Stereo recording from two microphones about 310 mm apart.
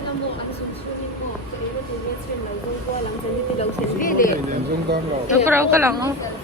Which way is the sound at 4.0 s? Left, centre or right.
Left.